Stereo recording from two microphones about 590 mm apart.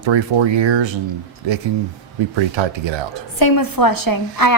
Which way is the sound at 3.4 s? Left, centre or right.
Left.